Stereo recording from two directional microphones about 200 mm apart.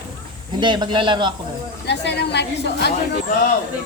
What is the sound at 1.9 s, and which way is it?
A woman's voice, 55° left (ahead or behind).